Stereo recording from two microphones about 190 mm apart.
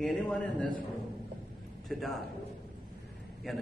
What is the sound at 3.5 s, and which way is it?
Speech, centre (ahead or behind).